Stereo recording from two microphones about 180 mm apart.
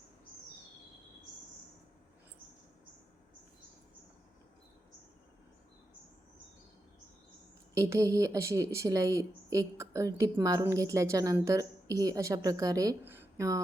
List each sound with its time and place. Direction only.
7.8 s a woman's voice: 15° right (ahead or behind)